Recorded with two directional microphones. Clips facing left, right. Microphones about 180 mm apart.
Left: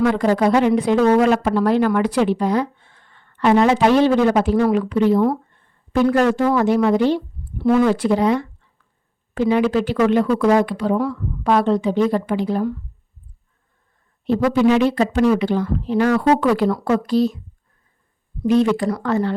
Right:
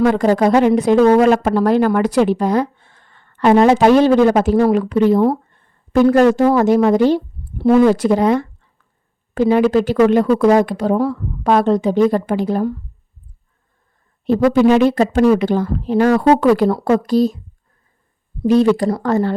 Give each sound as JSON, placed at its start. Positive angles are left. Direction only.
{"t": 0.0, "sound": "speech", "side_deg": -45}
{"t": 14.3, "sound": "speech", "side_deg": -45}
{"t": 18.4, "sound": "speech", "side_deg": -35}